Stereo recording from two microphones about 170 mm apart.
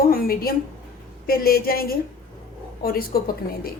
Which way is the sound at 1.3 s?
60° left (ahead or behind).